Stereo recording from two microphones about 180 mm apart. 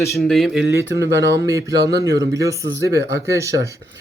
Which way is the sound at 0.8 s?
15° right (ahead or behind).